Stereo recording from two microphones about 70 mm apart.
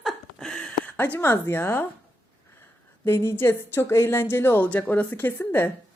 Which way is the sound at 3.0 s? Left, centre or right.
Left.